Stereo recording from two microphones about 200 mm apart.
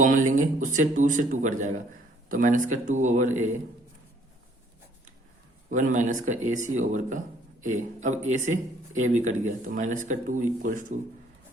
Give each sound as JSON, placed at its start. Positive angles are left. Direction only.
{"t": 0.0, "sound": "speech", "side_deg": -40}
{"t": 5.7, "sound": "speech", "side_deg": -40}